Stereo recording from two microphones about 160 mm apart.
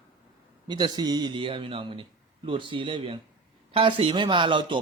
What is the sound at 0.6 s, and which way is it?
A man's voice, 25° right (ahead or behind).